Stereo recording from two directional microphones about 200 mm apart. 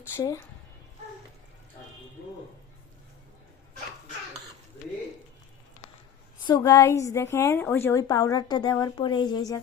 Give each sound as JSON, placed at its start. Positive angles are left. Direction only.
{"t": 0.1, "sound": "a woman's voice", "side_deg": 10}
{"t": 6.4, "sound": "a woman's voice", "side_deg": 20}